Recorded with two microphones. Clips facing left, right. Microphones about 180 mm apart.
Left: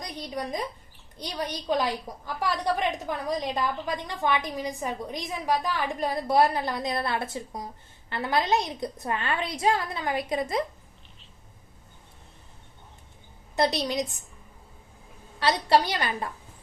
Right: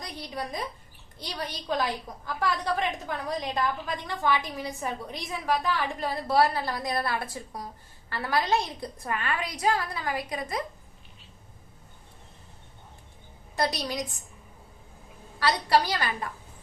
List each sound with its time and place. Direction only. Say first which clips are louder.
0.0 s a woman's voice: left 2 dB; 20° left (ahead or behind)
3.8 s a woman's voice: even; 20° left (ahead or behind)
13.6 s a woman's voice: left 4 dB; 25° left (ahead or behind)
15.4 s a woman's voice: left 1 dB; 25° left (ahead or behind)